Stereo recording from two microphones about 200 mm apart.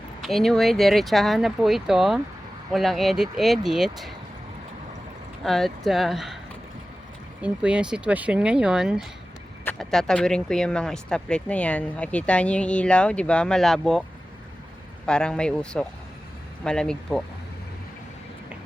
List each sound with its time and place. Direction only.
0.2 s speech: centre (ahead or behind)
5.4 s speech: centre (ahead or behind)
7.4 s speech: 5° right (ahead or behind)
15.0 s speech: 5° left (ahead or behind)